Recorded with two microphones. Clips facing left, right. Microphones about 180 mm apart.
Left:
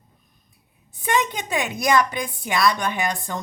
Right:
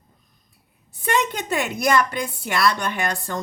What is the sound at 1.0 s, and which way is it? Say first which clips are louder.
Speech: even; 15° left (ahead or behind).